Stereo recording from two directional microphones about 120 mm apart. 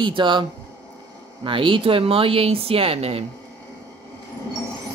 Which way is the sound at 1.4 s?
45° right (ahead or behind).